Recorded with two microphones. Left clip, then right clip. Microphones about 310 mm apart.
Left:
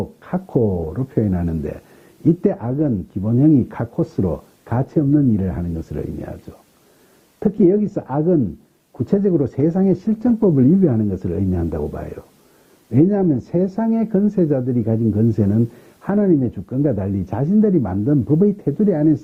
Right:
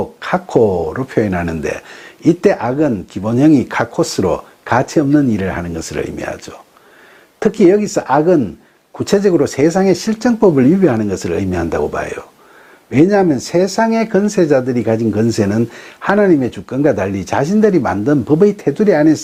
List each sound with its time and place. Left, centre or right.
0.2 s a sound: centre
0.5 s speech: right
0.9 s speech: centre
7.9 s speech: centre